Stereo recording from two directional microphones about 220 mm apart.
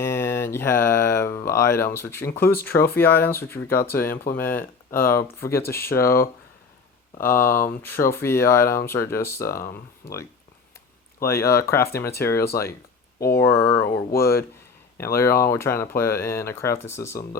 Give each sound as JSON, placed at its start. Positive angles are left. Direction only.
{"t": 0.0, "sound": "speech", "side_deg": 10}
{"t": 5.5, "sound": "speech", "side_deg": 45}
{"t": 6.0, "sound": "speech", "side_deg": 10}
{"t": 7.4, "sound": "speech", "side_deg": 40}
{"t": 7.8, "sound": "speech", "side_deg": 10}
{"t": 9.6, "sound": "speech", "side_deg": 40}
{"t": 11.2, "sound": "speech", "side_deg": 15}
{"t": 11.8, "sound": "speech", "side_deg": 45}
{"t": 14.9, "sound": "speech", "side_deg": 15}